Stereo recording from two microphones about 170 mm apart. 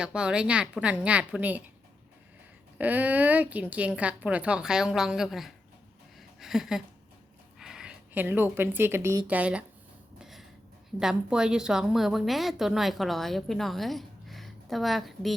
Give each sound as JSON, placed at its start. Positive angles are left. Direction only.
{"t": 0.0, "sound": "speech", "side_deg": -5}
{"t": 2.7, "sound": "speech", "side_deg": -10}
{"t": 6.1, "sound": "a sound", "side_deg": 0}
{"t": 7.6, "sound": "speech", "side_deg": -5}
{"t": 10.2, "sound": "a sound", "side_deg": 0}
{"t": 11.0, "sound": "a woman's voice", "side_deg": -5}